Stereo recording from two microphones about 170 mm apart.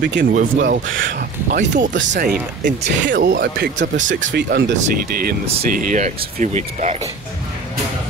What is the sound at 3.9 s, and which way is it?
Speech, 50° right (ahead or behind).